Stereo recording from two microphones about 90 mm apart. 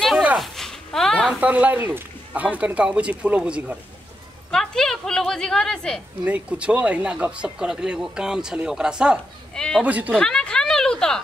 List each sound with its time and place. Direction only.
0.4 s a sound: 5° left (ahead or behind)
1.4 s speech: 15° right (ahead or behind)
4.5 s a woman's voice: 5° left (ahead or behind)
6.2 s speech: 15° right (ahead or behind)
9.6 s speech: 10° left (ahead or behind)
9.8 s speech: 15° right (ahead or behind)
10.1 s a sound: 10° left (ahead or behind)